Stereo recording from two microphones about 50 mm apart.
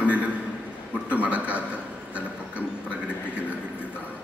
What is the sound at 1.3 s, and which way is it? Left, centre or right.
Speech, right.